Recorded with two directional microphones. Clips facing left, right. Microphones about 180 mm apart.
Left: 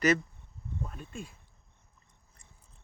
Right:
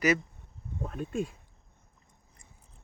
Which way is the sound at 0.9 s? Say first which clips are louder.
Right 10 dB; 50° right (ahead or behind).